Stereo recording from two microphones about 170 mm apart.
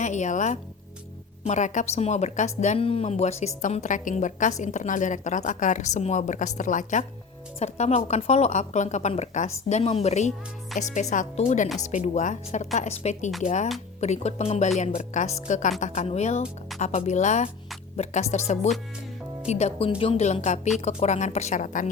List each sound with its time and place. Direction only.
0.0 s a woman's voice: 45° left (ahead or behind)
10.7 s speech: centre (ahead or behind)
11.1 s a woman's voice: 45° left (ahead or behind)